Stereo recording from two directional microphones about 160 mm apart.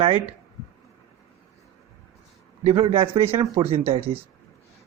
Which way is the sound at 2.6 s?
35° right (ahead or behind).